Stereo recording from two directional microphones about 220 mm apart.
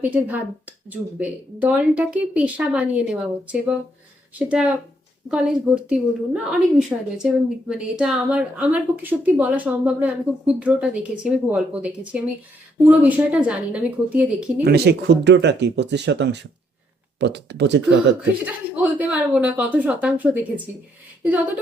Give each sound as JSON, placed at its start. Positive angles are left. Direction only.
{"t": 0.0, "sound": "a woman's voice", "side_deg": -5}
{"t": 14.6, "sound": "speech", "side_deg": -50}
{"t": 18.4, "sound": "speech", "side_deg": -5}